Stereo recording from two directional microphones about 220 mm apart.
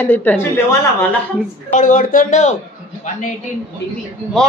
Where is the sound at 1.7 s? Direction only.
35° left (ahead or behind).